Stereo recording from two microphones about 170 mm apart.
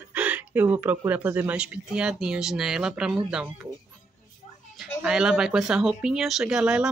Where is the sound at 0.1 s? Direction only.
10° right (ahead or behind).